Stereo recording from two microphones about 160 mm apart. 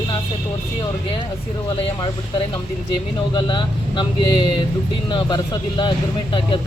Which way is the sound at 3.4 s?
30° left (ahead or behind).